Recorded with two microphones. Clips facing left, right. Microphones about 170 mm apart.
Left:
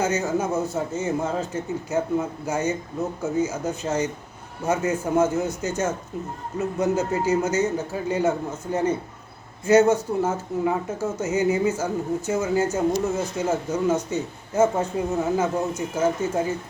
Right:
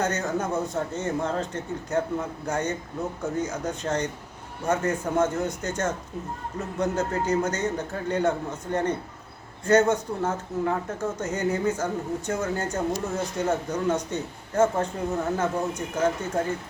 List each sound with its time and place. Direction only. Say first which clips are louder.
0.0 s a man's voice: left 3 dB; 5° left (ahead or behind)